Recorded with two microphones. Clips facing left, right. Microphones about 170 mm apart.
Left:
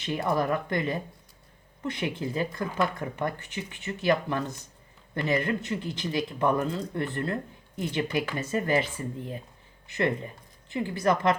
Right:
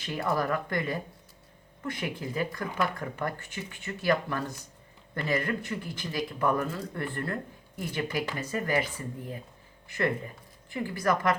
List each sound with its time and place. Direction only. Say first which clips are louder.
0.0 s speech: left 2 dB; 20° left (ahead or behind)